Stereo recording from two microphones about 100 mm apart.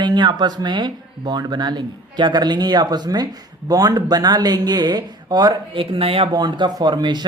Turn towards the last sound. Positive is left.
turn(degrees=-45)  # may be behind; listen again after turning